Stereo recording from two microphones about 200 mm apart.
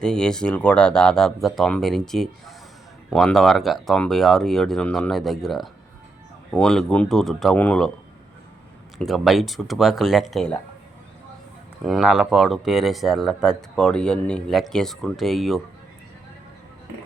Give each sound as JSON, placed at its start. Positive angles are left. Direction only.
{"t": 0.0, "sound": "speech", "side_deg": 5}
{"t": 9.0, "sound": "speech", "side_deg": 0}
{"t": 11.9, "sound": "speech", "side_deg": 0}